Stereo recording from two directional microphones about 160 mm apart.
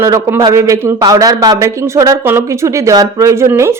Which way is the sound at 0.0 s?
20° right (ahead or behind).